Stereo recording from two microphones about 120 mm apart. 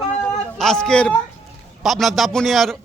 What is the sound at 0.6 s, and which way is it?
Speech, 5° left (ahead or behind).